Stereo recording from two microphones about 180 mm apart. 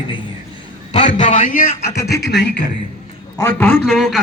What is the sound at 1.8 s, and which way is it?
Speech, 60° left (ahead or behind).